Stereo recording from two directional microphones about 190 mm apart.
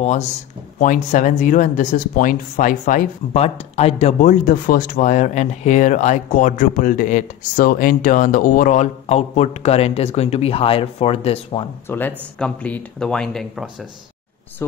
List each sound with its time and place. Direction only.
0.7 s speech: 45° left (ahead or behind)
4.3 s speech: 45° left (ahead or behind); by 11.6 s 30° left (ahead or behind)
11.9 s speech: 10° left (ahead or behind)